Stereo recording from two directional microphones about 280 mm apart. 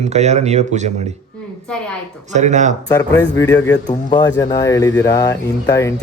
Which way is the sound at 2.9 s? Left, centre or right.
Centre.